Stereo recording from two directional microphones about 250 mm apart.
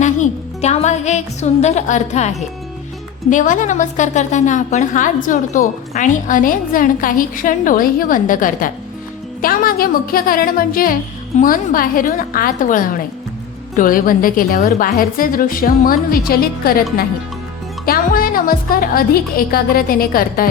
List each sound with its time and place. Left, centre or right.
0.0 s a woman's voice: left